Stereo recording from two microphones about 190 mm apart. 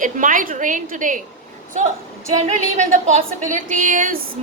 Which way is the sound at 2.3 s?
40° right (ahead or behind).